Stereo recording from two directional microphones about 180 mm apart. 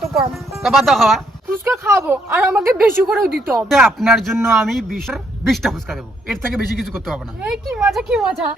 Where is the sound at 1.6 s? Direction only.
15° right (ahead or behind).